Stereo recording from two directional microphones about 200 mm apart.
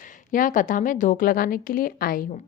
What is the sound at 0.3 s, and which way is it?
A woman's voice, 40° left (ahead or behind).